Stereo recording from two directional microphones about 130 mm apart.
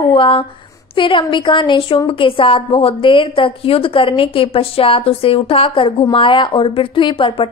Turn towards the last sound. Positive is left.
turn(degrees=40)  # may be behind; listen again after turning